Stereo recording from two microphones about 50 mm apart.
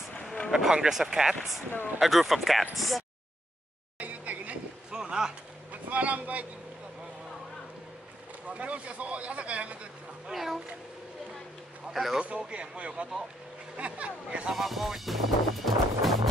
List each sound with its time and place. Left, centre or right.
0.5 s speech: centre
4.0 s a sound: right
4.9 s a sound: centre
5.7 s speech: right
8.5 s speech: right
10.2 s speech: centre
11.9 s speech: centre
12.2 s speech: right
14.5 s speech: centre